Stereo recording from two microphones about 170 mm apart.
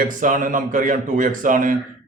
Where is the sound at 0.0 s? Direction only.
50° right (ahead or behind).